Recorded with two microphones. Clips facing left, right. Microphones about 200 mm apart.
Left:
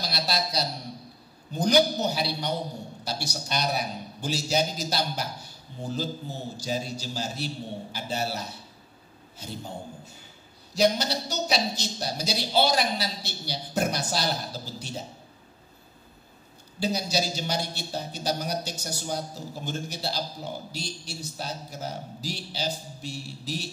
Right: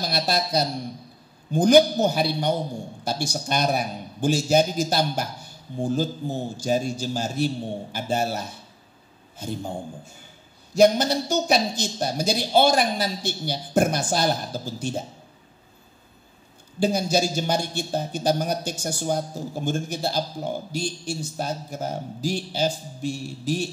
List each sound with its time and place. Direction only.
0.0 s a man's voice: 50° right (ahead or behind)
16.8 s a man's voice: 50° right (ahead or behind)